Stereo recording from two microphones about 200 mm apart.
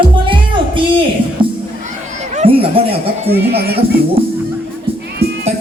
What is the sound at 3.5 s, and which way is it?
Speech, 50° right (ahead or behind).